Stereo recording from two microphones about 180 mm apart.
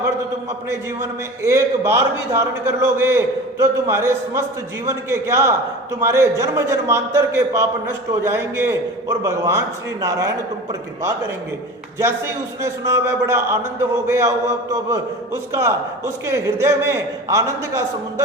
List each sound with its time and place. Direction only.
1.4 s a man's voice: 15° right (ahead or behind)
11.9 s a man's voice: 15° right (ahead or behind)